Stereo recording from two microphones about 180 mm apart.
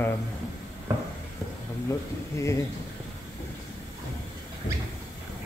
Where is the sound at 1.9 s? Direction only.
15° left (ahead or behind).